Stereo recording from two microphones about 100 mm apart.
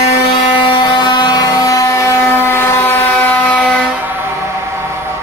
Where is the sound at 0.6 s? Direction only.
55° left (ahead or behind); by 3.0 s 20° left (ahead or behind).